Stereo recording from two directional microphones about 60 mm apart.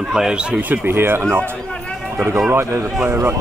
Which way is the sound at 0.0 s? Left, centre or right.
Centre.